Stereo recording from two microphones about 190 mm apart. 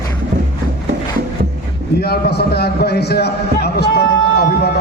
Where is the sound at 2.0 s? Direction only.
60° left (ahead or behind).